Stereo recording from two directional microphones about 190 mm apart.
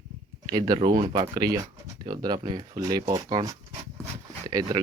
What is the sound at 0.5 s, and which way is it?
Speech, 20° right (ahead or behind).